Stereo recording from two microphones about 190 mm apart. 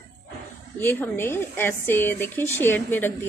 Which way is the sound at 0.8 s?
10° left (ahead or behind).